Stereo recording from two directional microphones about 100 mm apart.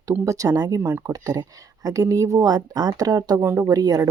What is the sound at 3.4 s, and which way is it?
Speech, 25° right (ahead or behind).